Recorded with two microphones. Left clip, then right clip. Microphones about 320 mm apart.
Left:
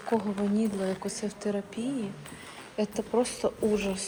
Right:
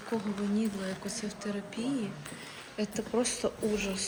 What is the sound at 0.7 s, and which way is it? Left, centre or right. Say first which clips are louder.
Speech: left 6 dB; centre.